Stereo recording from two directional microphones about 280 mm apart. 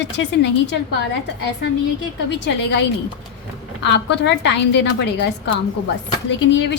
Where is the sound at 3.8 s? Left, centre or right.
Left.